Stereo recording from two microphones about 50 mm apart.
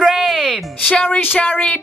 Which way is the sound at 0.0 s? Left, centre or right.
Centre.